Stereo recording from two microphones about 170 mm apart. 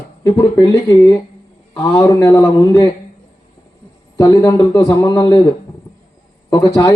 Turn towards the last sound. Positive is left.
turn(degrees=20)  # may be behind; listen again after turning